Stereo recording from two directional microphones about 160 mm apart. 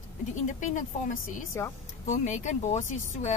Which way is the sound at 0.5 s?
55° left (ahead or behind).